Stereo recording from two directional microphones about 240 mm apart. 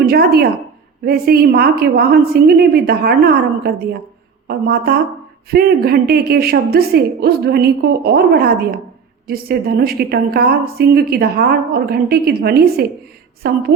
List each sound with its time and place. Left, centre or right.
0.1 s a woman's voice: right